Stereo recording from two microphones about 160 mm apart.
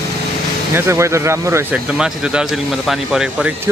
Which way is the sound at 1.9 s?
5° right (ahead or behind).